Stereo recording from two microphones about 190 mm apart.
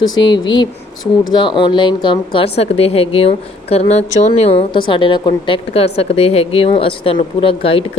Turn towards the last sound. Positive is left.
turn(degrees=30)  # may be behind; listen again after turning